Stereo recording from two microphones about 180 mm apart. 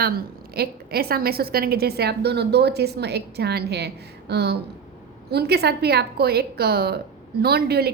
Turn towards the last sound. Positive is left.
turn(degrees=-60)  # may be behind; listen again after turning